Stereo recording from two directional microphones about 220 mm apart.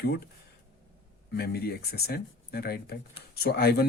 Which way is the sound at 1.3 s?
45° left (ahead or behind).